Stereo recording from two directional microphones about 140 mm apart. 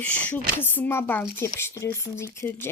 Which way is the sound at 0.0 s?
10° left (ahead or behind).